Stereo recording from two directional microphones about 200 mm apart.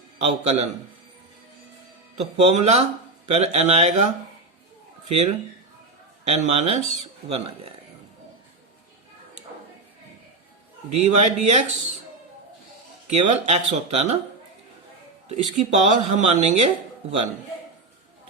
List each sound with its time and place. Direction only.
0.2 s speech: 35° right (ahead or behind)
2.1 s speech: 30° right (ahead or behind)
10.8 s speech: 35° right (ahead or behind)
13.1 s speech: 35° right (ahead or behind)
15.3 s speech: 35° right (ahead or behind)